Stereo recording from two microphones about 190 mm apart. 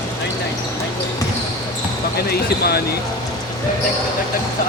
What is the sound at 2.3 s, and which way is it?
Speech, 55° left (ahead or behind).